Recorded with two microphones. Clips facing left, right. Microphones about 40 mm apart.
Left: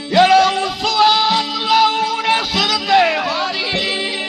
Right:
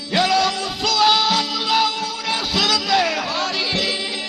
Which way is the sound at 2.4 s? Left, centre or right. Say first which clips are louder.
Left 2 dB; centre.